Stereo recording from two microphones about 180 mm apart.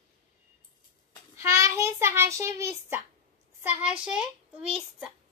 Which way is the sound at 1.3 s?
15° right (ahead or behind).